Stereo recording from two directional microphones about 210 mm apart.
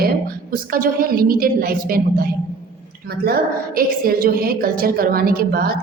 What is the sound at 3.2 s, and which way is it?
A woman's voice, 45° right (ahead or behind).